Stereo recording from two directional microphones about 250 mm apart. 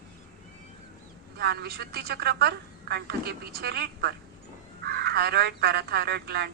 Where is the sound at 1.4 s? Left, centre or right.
Right.